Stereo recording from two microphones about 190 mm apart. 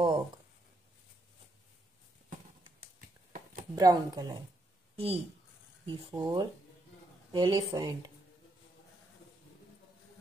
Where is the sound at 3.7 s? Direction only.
20° right (ahead or behind).